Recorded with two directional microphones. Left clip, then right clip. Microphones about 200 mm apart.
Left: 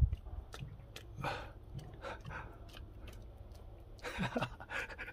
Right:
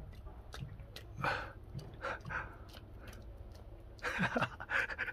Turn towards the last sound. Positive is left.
turn(degrees=0)  # may be behind; listen again after turning